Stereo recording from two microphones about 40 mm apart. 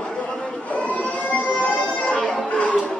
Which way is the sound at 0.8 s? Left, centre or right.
Left.